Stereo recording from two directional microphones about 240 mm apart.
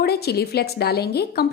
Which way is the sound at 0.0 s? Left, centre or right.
Left.